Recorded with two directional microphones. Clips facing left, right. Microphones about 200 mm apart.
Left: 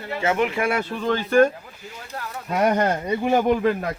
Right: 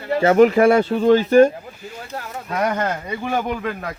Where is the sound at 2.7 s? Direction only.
20° left (ahead or behind).